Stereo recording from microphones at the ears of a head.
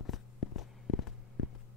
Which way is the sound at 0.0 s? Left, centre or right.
Left.